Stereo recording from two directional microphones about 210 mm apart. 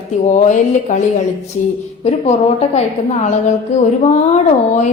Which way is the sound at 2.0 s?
30° left (ahead or behind).